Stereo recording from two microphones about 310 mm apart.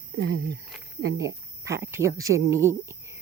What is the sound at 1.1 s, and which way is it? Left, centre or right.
Speech, centre.